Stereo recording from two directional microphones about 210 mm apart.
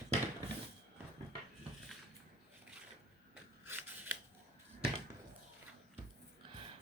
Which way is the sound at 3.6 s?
10° right (ahead or behind).